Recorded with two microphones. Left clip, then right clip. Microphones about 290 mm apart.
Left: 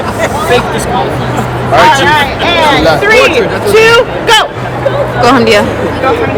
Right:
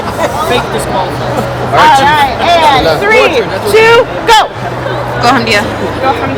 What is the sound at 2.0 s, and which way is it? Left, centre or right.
Speech, right.